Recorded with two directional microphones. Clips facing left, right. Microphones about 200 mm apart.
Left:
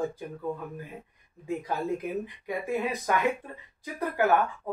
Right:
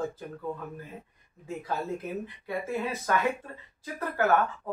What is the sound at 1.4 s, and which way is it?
Speech, 15° left (ahead or behind).